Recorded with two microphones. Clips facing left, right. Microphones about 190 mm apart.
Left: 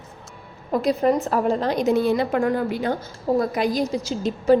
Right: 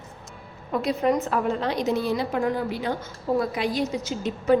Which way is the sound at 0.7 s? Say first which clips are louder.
Left 3 dB; 40° left (ahead or behind).